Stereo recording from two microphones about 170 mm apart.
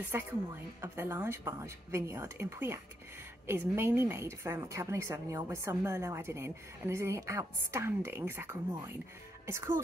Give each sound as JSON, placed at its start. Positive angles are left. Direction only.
{"t": 0.1, "sound": "a woman's voice", "side_deg": -15}